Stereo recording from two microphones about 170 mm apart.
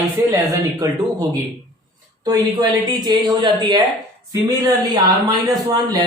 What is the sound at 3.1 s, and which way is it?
A man's voice, 25° right (ahead or behind).